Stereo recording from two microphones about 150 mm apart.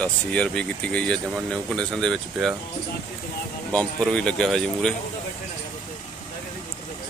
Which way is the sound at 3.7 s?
5° left (ahead or behind).